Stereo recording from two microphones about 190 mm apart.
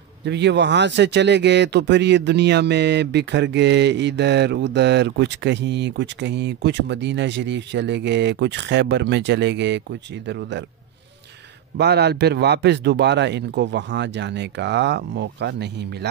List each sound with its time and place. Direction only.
0.2 s speech: 65° right (ahead or behind)
11.7 s speech: 60° right (ahead or behind)